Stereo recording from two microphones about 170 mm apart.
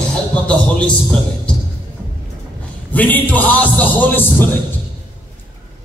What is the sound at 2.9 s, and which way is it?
Music, 10° left (ahead or behind).